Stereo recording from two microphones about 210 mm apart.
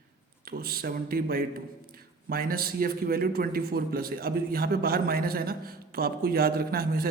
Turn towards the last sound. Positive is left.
turn(degrees=-45)  # may be behind; listen again after turning